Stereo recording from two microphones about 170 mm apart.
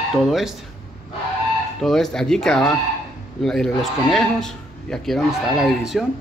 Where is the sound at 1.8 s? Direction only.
Centre (ahead or behind).